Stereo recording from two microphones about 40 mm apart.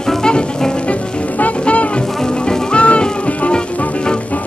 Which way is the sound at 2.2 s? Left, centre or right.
Centre.